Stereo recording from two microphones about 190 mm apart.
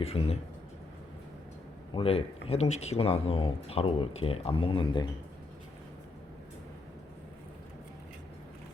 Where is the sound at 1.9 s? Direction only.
30° left (ahead or behind).